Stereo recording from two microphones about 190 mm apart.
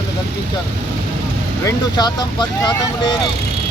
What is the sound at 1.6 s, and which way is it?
Speech, 20° left (ahead or behind).